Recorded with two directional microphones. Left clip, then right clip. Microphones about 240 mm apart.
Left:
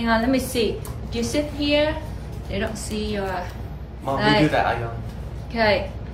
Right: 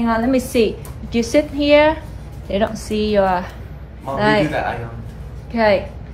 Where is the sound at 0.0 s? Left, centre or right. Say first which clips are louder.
Right 3 dB; centre.